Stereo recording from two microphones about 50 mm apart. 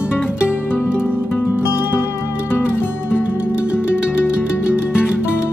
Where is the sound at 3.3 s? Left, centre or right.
Right.